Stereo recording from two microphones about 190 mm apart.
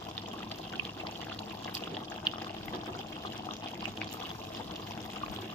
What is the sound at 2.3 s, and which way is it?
Water, 20° left (ahead or behind).